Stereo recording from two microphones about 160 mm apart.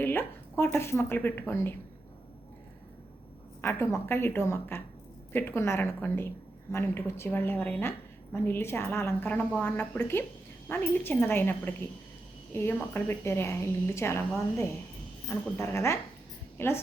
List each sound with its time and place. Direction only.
0.0 s speech: 15° left (ahead or behind)
3.6 s a woman's voice: 15° left (ahead or behind)